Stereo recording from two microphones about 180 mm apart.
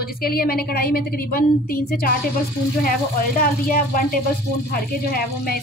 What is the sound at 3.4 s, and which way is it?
A woman's voice, 50° left (ahead or behind).